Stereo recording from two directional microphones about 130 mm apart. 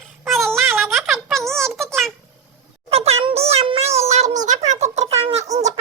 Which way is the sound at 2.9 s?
50° right (ahead or behind).